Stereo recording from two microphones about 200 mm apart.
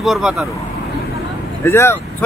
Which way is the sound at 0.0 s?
Centre (ahead or behind).